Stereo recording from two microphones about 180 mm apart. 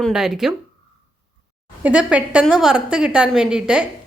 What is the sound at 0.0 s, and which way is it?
Speech, 5° right (ahead or behind).